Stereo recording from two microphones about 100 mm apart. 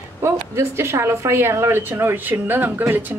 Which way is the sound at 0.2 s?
25° right (ahead or behind).